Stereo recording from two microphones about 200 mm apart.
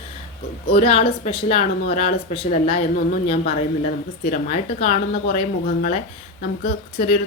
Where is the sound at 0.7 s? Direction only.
30° left (ahead or behind).